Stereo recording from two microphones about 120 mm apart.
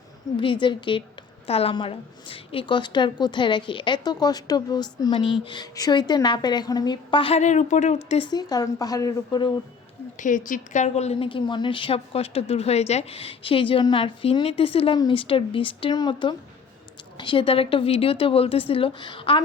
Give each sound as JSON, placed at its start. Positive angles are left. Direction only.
{"t": 0.3, "sound": "a woman's voice", "side_deg": 40}
{"t": 1.5, "sound": "a woman's voice", "side_deg": 55}
{"t": 7.3, "sound": "speech", "side_deg": 85}
{"t": 8.2, "sound": "a woman's voice", "side_deg": 35}
{"t": 10.2, "sound": "a woman's voice", "side_deg": 90}